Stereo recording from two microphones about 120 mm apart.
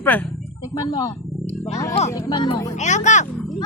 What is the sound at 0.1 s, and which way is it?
Speech, 15° left (ahead or behind).